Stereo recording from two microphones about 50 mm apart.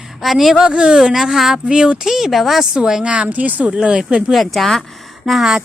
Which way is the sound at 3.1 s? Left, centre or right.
Right.